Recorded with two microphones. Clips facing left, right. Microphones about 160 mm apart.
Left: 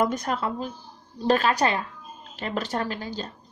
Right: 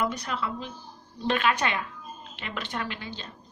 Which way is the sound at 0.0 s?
45° left (ahead or behind).